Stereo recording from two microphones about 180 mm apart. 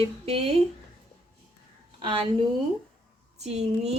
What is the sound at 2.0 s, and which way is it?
Speech, 30° right (ahead or behind).